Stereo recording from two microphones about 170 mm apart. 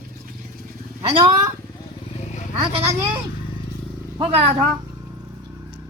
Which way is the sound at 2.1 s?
40° left (ahead or behind).